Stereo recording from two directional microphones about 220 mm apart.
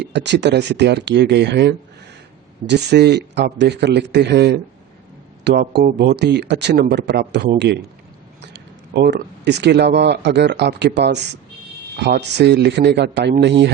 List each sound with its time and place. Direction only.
0.0 s speech: 50° right (ahead or behind)